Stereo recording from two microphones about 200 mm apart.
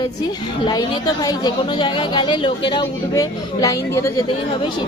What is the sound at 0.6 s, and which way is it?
Speech, 20° left (ahead or behind).